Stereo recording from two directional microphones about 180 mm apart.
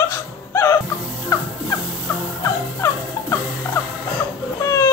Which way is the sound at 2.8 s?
15° left (ahead or behind).